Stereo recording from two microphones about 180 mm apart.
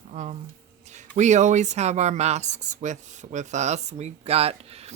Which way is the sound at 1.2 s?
40° right (ahead or behind).